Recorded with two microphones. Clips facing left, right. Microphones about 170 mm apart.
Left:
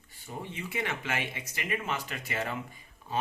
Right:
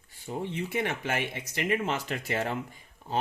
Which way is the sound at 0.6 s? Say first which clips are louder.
Right 1 dB; 50° right (ahead or behind).